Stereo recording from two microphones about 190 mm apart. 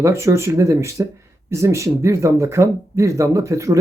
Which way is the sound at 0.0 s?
15° right (ahead or behind).